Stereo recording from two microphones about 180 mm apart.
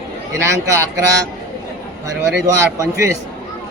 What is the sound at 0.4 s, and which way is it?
Speech, 15° right (ahead or behind).